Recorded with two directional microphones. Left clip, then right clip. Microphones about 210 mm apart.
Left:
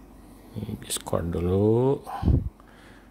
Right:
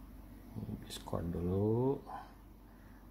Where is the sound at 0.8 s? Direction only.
45° left (ahead or behind).